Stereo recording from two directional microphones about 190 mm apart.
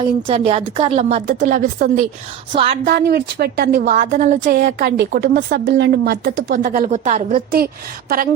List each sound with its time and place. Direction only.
0.0 s a woman's voice: 30° right (ahead or behind)
4.4 s a woman's voice: 55° right (ahead or behind)